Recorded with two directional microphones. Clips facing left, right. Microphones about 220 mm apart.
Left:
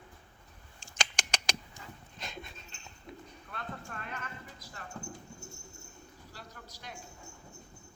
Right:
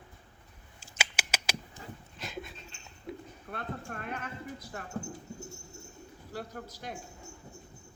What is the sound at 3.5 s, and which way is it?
Speech, 55° right (ahead or behind).